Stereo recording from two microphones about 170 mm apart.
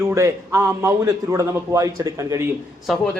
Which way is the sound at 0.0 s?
15° right (ahead or behind).